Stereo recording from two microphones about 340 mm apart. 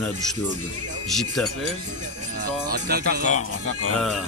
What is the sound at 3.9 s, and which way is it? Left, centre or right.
Speech, centre.